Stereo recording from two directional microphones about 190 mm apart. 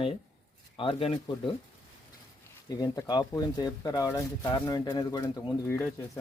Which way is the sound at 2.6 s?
20° left (ahead or behind).